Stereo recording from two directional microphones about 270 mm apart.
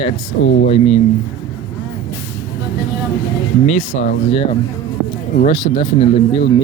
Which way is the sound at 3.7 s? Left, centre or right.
Left.